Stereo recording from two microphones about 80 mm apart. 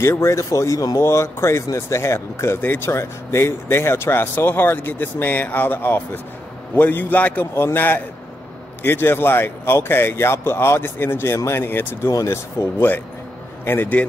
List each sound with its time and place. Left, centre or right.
0.0 s a man's voice: left
12.1 s speech: left
12.5 s a man's voice: left